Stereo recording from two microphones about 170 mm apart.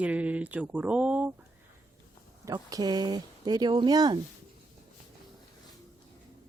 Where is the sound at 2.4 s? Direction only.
20° right (ahead or behind).